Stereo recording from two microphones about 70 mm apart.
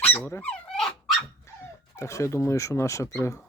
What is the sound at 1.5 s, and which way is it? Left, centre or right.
Dog, left.